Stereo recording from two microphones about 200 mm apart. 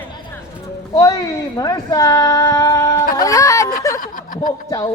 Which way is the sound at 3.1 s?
15° left (ahead or behind).